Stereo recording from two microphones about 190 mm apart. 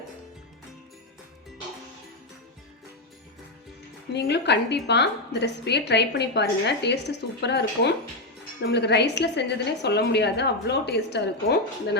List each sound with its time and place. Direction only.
4.1 s a woman's voice: 60° left (ahead or behind)